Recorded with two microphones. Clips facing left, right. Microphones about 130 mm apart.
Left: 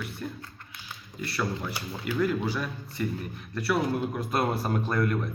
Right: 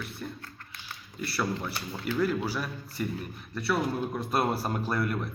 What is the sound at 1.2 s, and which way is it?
Speech, 5° right (ahead or behind).